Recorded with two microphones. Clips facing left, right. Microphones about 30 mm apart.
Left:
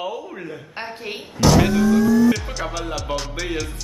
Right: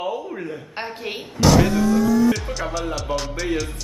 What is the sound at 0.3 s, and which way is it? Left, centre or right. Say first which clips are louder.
Speech: right 3 dB; centre.